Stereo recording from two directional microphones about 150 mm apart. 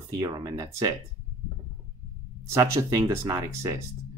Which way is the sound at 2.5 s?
20° right (ahead or behind).